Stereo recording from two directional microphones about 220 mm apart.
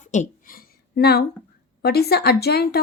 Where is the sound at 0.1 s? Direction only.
35° left (ahead or behind).